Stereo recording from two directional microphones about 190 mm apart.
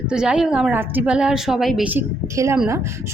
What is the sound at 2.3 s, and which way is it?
Speech, 15° right (ahead or behind).